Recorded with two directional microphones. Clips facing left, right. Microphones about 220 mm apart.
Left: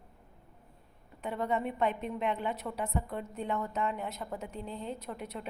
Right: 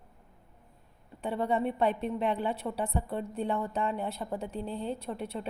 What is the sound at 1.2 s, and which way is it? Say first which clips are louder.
A woman's voice: right 3 dB; 30° right (ahead or behind).